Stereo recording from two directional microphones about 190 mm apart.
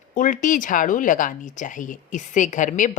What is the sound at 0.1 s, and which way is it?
A woman's voice, 45° left (ahead or behind).